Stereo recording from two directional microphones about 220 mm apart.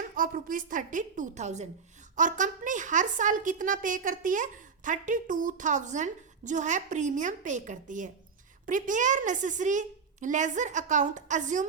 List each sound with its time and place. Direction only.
0.2 s a woman's voice: 40° right (ahead or behind)